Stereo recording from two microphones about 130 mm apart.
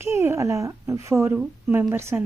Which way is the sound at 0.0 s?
20° right (ahead or behind).